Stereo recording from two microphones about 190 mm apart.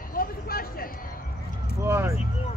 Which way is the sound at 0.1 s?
50° left (ahead or behind).